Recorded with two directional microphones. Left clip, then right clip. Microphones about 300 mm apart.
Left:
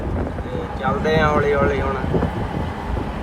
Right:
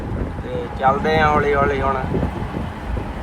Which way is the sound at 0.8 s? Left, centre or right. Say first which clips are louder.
Right 3 dB; centre.